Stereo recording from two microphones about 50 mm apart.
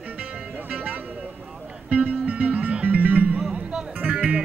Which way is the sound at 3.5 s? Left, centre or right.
Centre.